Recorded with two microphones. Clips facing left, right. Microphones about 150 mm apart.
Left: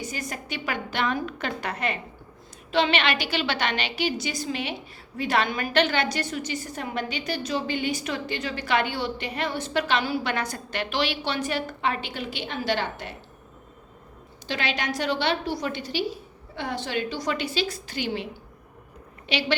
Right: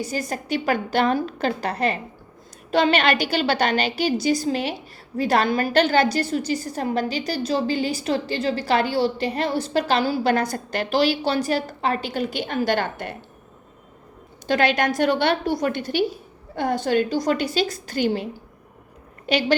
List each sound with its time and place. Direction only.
0.0 s a woman's voice: 35° right (ahead or behind); by 13.1 s 50° right (ahead or behind)
14.4 s a woman's voice: 50° right (ahead or behind)